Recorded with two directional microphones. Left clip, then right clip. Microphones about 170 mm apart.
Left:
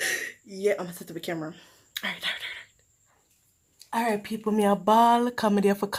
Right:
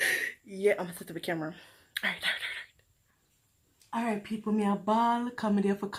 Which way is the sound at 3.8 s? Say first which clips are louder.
Left 6 dB; 35° left (ahead or behind).